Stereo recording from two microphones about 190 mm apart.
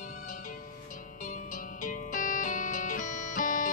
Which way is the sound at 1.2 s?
45° left (ahead or behind).